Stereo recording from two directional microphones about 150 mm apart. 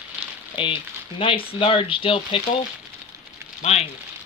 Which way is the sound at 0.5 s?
35° left (ahead or behind).